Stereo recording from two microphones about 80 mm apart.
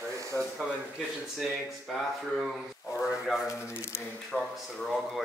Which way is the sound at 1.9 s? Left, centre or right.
Centre.